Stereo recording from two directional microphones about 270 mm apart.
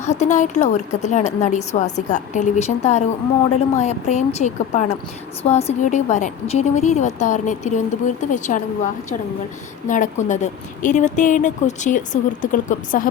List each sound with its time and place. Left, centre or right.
0.0 s a woman's voice: left
9.8 s a woman's voice: left